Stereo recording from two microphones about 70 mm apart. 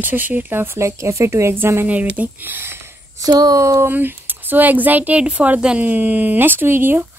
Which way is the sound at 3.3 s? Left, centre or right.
Right.